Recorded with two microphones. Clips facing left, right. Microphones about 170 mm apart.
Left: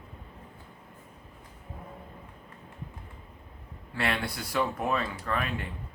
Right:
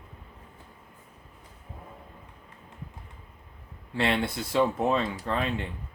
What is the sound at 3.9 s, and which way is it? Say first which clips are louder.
Speech: right 4 dB; 25° right (ahead or behind).